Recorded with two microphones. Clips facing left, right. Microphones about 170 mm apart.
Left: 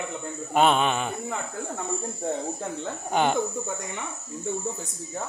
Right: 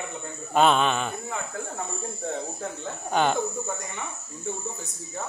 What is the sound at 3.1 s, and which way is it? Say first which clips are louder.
Speech: even; 15° left (ahead or behind).